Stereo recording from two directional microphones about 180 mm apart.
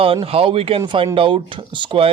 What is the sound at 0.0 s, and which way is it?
A man's voice, 30° right (ahead or behind).